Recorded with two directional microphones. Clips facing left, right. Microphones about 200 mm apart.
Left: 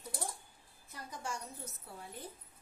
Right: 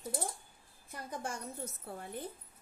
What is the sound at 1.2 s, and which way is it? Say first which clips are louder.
Speech: even; 55° right (ahead or behind).